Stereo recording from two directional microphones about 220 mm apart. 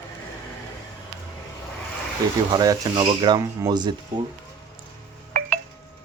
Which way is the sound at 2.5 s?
15° right (ahead or behind).